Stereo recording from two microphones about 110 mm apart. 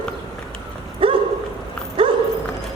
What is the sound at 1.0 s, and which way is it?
Dog, 55° right (ahead or behind).